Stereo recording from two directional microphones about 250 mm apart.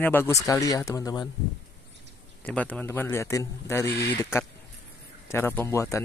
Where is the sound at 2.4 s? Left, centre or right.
Centre.